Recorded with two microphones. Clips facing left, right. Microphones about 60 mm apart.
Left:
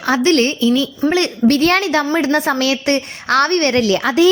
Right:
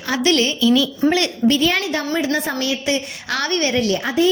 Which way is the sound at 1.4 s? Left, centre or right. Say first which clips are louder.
Left 4 dB; left.